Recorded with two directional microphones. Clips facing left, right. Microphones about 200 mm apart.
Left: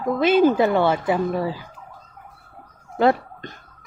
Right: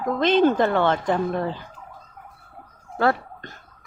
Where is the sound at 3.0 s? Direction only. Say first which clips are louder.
Left 4 dB; 20° left (ahead or behind).